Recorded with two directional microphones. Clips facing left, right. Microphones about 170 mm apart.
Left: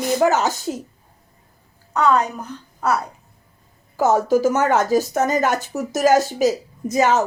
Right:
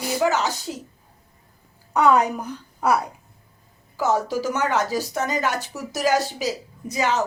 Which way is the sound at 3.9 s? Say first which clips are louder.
Left 6 dB; 45° left (ahead or behind).